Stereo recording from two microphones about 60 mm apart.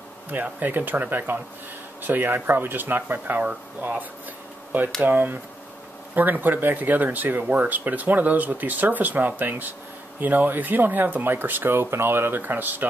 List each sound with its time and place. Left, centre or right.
0.3 s speech: right
5.0 s speech: right